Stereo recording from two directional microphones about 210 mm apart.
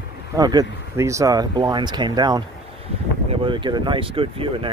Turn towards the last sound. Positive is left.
turn(degrees=-25)  # may be behind; listen again after turning